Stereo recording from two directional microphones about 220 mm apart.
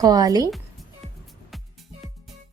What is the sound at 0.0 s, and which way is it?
Speech, 15° right (ahead or behind).